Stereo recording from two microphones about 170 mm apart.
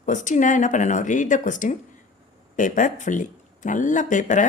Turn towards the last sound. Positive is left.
turn(degrees=45)  # may be behind; listen again after turning